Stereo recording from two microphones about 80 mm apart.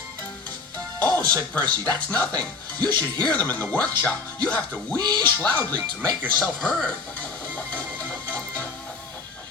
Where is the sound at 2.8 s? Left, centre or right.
Right.